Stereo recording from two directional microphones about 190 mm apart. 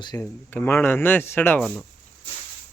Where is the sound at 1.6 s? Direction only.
Centre (ahead or behind).